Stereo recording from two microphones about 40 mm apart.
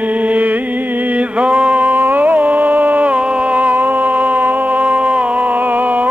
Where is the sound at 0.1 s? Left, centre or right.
Right.